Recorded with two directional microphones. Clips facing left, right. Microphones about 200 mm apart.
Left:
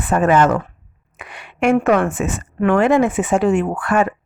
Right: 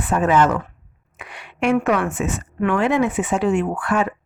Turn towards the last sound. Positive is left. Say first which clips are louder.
# left 3 dB
turn(degrees=50)  # may be behind; listen again after turning